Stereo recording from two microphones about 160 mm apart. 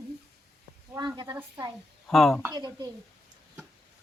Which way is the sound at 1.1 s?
25° right (ahead or behind).